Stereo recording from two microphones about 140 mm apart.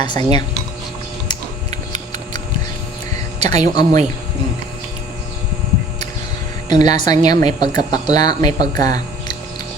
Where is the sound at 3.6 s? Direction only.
25° left (ahead or behind).